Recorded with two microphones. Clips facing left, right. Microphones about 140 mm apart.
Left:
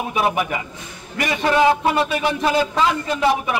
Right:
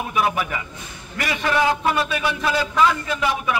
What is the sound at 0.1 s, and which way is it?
A man's voice, 25° left (ahead or behind).